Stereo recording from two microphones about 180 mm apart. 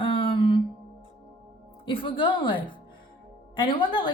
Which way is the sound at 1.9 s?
30° left (ahead or behind).